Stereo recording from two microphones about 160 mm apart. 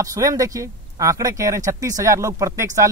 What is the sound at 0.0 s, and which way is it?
Speech, 20° right (ahead or behind).